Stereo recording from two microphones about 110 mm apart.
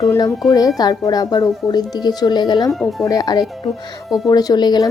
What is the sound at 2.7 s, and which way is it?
Speech, centre (ahead or behind).